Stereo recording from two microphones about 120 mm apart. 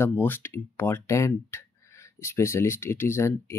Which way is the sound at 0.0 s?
15° left (ahead or behind).